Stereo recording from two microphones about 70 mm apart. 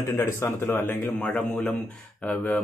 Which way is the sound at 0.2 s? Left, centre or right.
Left.